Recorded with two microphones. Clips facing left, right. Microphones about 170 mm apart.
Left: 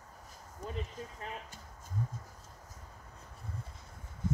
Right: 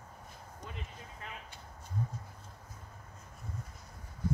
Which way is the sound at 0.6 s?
40° left (ahead or behind).